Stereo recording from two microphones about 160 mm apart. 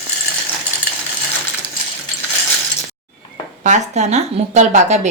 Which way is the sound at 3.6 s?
50° right (ahead or behind).